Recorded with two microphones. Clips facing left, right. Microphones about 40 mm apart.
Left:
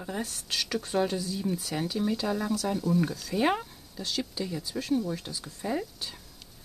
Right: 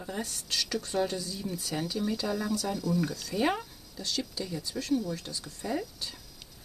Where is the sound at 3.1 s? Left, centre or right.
Centre.